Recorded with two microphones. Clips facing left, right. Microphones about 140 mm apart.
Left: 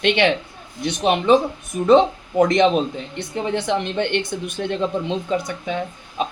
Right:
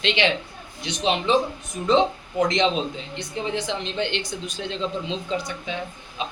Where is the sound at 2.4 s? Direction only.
55° left (ahead or behind).